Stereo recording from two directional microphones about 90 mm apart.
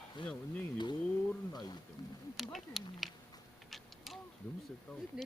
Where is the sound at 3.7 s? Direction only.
Centre (ahead or behind).